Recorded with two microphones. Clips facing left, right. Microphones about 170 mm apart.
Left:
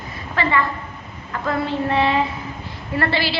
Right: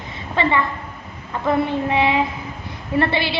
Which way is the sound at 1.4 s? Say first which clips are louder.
Right 3 dB; 15° right (ahead or behind).